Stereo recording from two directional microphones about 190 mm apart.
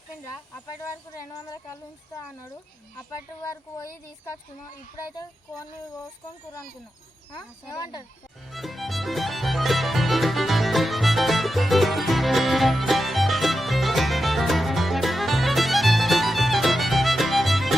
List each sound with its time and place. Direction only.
1.1 s music: 15° left (ahead or behind)
5.1 s music: 15° left (ahead or behind)
7.7 s speech: 20° left (ahead or behind)
8.5 s music: centre (ahead or behind)